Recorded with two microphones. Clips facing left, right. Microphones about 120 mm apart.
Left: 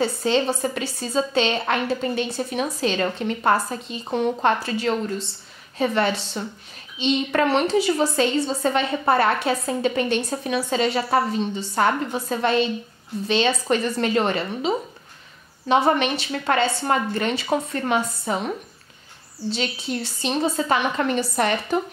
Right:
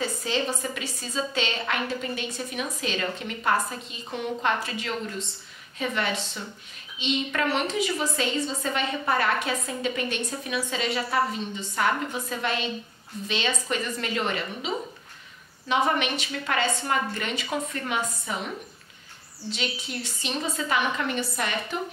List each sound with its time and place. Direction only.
0.0 s a woman's voice: 30° left (ahead or behind)
15.7 s a woman's voice: 30° left (ahead or behind)
19.5 s a woman's voice: 35° left (ahead or behind)